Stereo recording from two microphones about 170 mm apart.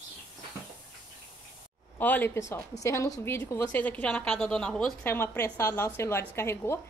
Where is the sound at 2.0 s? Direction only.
10° left (ahead or behind).